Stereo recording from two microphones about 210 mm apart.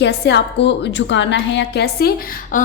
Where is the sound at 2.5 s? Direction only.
40° left (ahead or behind).